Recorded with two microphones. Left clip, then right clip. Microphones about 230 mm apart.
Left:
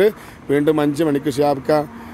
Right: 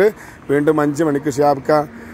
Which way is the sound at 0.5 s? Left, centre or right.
Centre.